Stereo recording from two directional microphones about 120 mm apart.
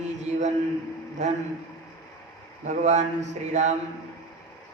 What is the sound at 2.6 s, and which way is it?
A woman's voice, 80° right.